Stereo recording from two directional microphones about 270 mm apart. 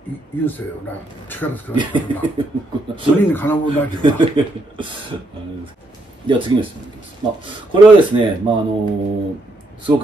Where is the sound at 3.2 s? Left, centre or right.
Centre.